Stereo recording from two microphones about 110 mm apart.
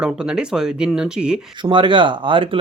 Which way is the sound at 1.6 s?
45° right (ahead or behind).